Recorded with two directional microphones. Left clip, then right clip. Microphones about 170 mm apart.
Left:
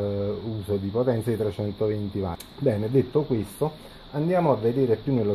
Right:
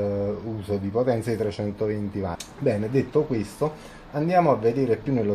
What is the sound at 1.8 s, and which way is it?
Speech, 35° left (ahead or behind).